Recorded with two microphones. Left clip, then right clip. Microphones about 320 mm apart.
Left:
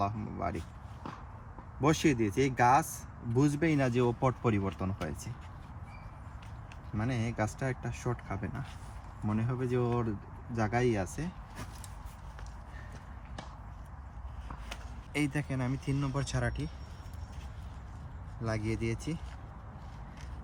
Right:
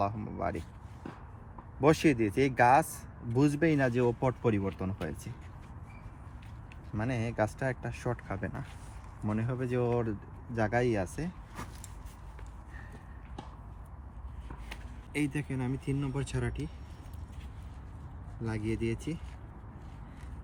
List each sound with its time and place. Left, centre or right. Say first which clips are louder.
0.0 s speech: right 1 dB; centre
1.8 s speech: right 3 dB; centre
3.2 s a man's voice: right 2 dB; centre
4.7 s speech: even; centre
6.9 s a man's voice: right 2 dB; centre
14.7 s speech: left 1 dB; centre
18.4 s speech: even; centre